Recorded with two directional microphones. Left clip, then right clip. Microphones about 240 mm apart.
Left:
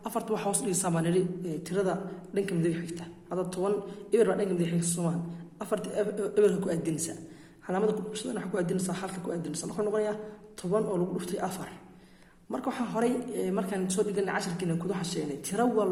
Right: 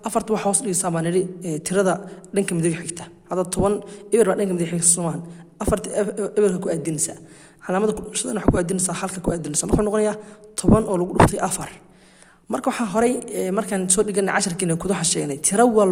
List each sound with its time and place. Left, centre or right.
0.0 s a man's voice: right